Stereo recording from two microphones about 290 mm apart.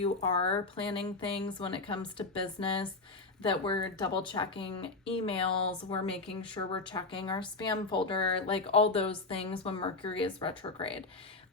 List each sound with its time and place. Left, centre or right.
0.0 s speech: centre